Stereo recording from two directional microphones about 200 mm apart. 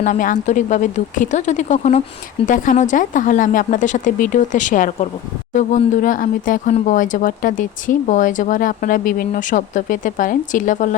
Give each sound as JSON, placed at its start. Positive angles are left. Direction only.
{"t": 0.0, "sound": "speech", "side_deg": 40}